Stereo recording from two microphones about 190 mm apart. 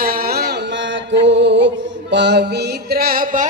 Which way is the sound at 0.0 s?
50° right (ahead or behind).